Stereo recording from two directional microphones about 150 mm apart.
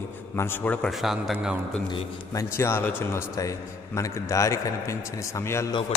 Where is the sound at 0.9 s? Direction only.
Centre (ahead or behind).